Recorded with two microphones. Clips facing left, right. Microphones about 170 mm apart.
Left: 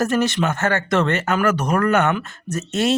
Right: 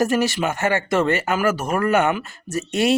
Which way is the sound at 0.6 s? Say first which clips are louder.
Even; 15° right (ahead or behind).